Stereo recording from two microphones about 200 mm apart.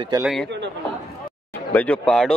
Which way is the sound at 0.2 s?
Centre (ahead or behind).